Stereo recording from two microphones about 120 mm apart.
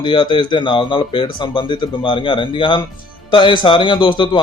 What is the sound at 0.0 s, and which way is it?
A man's voice, 40° left (ahead or behind).